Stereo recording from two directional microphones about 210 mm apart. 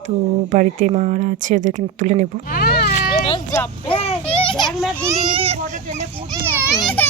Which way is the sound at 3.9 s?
30° left (ahead or behind).